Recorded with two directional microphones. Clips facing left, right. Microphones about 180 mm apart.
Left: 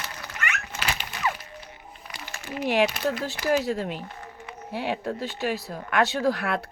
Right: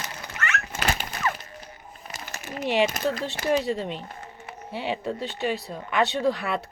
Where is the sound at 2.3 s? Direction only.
40° right (ahead or behind).